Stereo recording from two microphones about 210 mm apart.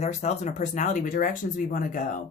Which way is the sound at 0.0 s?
35° left (ahead or behind).